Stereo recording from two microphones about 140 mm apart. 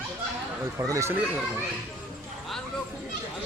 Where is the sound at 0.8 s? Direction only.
20° right (ahead or behind).